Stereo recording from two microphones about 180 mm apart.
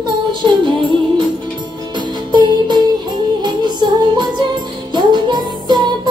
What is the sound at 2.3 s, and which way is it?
Music, 25° right (ahead or behind).